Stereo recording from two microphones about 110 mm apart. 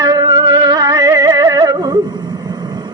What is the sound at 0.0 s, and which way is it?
Music, 35° right (ahead or behind).